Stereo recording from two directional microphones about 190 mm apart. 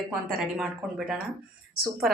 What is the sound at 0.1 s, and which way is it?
A woman's voice, centre (ahead or behind).